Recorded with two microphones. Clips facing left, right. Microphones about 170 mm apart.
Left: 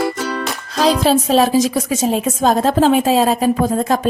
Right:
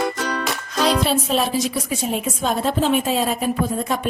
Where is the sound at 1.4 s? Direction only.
90° left.